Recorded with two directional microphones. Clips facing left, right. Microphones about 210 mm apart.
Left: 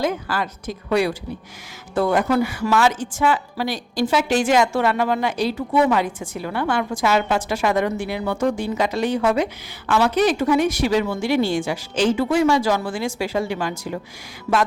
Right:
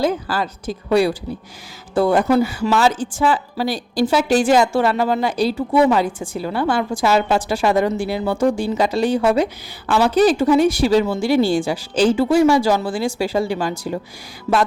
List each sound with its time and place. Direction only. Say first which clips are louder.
0.0 s a woman's voice: right 3 dB; 30° right (ahead or behind)
14.5 s music: right 2 dB; 25° right (ahead or behind)